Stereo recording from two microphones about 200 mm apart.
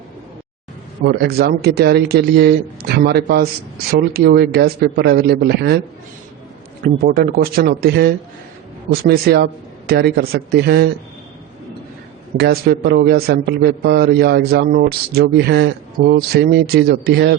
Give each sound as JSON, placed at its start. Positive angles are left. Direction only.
{"t": 1.0, "sound": "a man's voice", "side_deg": -50}
{"t": 6.8, "sound": "a man's voice", "side_deg": -45}
{"t": 12.4, "sound": "a man's voice", "side_deg": -50}